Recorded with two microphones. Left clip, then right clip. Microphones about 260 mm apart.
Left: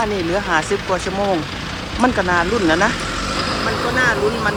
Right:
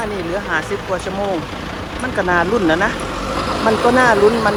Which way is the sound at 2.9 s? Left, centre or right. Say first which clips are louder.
Even; right.